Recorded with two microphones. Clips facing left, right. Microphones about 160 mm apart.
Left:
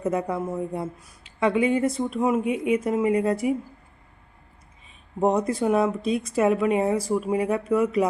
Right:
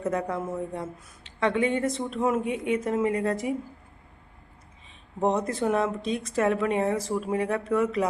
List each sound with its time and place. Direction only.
0.0 s speech: 15° left (ahead or behind)
5.2 s speech: 5° left (ahead or behind)